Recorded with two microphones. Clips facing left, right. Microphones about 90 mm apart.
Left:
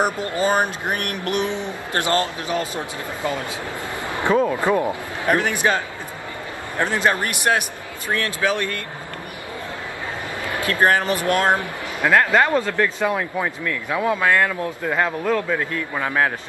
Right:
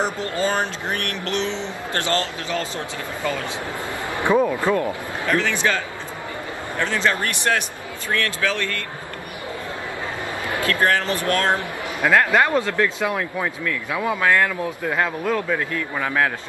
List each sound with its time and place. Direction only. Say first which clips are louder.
0.0 s speech: left 2 dB; 20° left (ahead or behind)
4.2 s speech: even; 15° right (ahead or behind)
4.5 s speech: left 1 dB; 15° left (ahead or behind)
6.8 s speech: left 2 dB; 20° left (ahead or behind)
10.6 s a man's voice: left 2 dB; 20° left (ahead or behind)
12.4 s speech: left 1 dB; 15° right (ahead or behind)
12.6 s a man's voice: left 1 dB; 5° left (ahead or behind)